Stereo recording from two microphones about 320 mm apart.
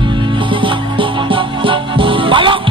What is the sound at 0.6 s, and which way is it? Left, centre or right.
Music, centre.